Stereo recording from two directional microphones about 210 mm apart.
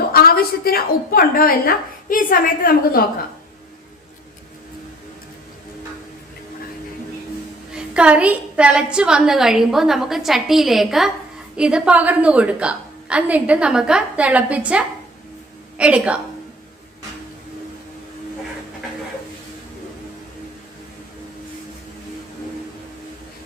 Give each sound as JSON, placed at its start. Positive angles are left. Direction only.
{"t": 0.0, "sound": "a woman's voice", "side_deg": 45}
{"t": 7.7, "sound": "a woman's voice", "side_deg": -5}